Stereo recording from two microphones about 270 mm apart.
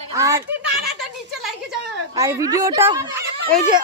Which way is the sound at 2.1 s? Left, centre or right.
Centre.